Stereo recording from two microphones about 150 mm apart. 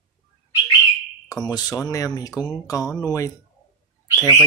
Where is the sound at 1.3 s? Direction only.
25° left (ahead or behind).